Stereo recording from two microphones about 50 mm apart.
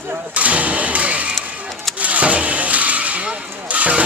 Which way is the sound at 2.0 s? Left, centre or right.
Right.